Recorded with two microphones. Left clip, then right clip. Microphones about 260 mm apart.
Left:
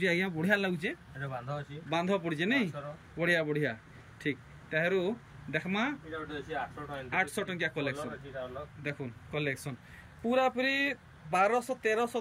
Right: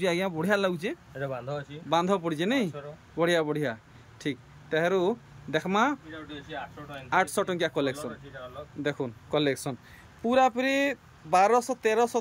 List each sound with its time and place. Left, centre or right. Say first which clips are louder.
0.0 s speech: right 3 dB; centre